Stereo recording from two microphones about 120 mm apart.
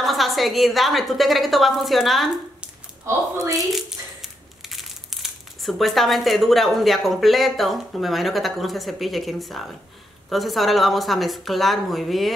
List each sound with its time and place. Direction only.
0.0 s a woman's voice: centre (ahead or behind)
3.1 s speech: 30° right (ahead or behind)
3.7 s a woman's voice: centre (ahead or behind)